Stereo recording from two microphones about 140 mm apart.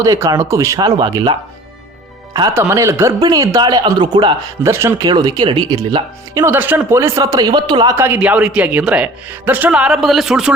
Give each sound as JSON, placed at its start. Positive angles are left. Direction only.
{"t": 0.0, "sound": "speech", "side_deg": -25}
{"t": 2.5, "sound": "speech", "side_deg": -15}
{"t": 4.6, "sound": "speech", "side_deg": -20}
{"t": 5.0, "sound": "speech", "side_deg": -30}
{"t": 6.5, "sound": "speech", "side_deg": -15}
{"t": 7.9, "sound": "speech", "side_deg": -15}